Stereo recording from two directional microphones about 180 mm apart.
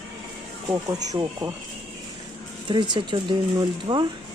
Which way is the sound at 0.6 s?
20° right (ahead or behind).